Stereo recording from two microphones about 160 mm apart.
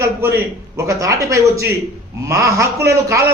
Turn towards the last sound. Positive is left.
turn(degrees=-20)  # may be behind; listen again after turning